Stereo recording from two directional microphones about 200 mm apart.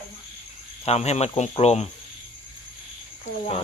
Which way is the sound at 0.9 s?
35° left (ahead or behind).